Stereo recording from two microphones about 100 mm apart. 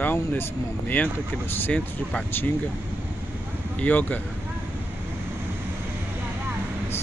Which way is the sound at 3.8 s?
15° left (ahead or behind).